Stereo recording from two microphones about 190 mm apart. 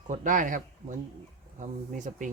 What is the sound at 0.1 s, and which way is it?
Speech, 45° right (ahead or behind).